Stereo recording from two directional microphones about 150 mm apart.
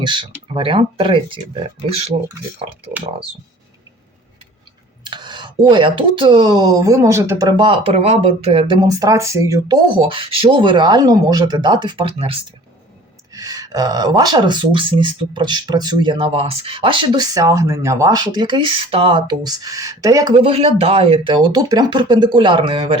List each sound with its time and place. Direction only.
0.0 s speech: 30° right (ahead or behind)
5.0 s speech: 30° right (ahead or behind)
8.9 s speech: 20° right (ahead or behind)
10.1 s speech: 35° right (ahead or behind)
13.3 s speech: 25° right (ahead or behind)
20.4 s speech: 40° right (ahead or behind)